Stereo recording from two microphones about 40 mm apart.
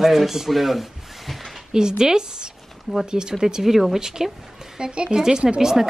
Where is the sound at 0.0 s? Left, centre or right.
Centre.